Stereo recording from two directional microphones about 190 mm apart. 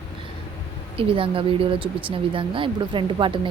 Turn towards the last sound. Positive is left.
turn(degrees=-25)  # may be behind; listen again after turning